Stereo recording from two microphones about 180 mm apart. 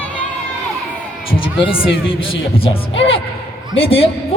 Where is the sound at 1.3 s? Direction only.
30° left (ahead or behind).